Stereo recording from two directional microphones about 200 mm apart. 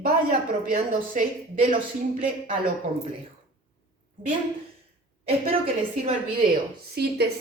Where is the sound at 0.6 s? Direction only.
40° right (ahead or behind).